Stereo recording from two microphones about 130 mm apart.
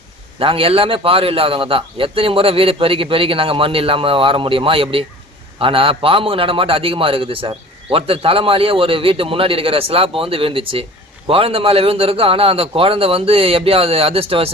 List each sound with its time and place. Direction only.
0.3 s a man's voice: 45° right (ahead or behind)